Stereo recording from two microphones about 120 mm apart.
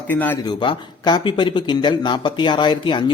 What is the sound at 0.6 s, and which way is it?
Speech, 40° left (ahead or behind).